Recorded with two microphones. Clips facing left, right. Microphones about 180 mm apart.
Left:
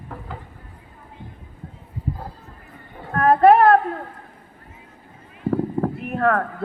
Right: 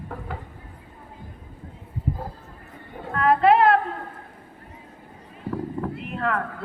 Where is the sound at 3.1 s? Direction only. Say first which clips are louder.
Left 4 dB; 45° left (ahead or behind).